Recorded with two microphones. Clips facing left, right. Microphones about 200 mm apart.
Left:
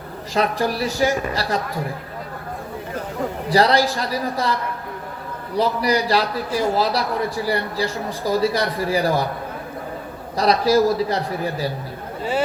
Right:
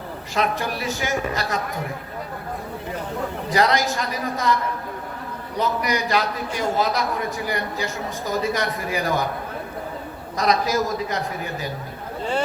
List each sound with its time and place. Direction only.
0.3 s a man's voice: 35° left (ahead or behind)
3.5 s a man's voice: 35° left (ahead or behind)
5.5 s a man's voice: 35° left (ahead or behind)
10.3 s a man's voice: 35° left (ahead or behind)